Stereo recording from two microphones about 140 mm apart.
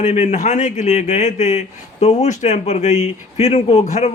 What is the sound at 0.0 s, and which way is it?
A man's voice, 50° left (ahead or behind).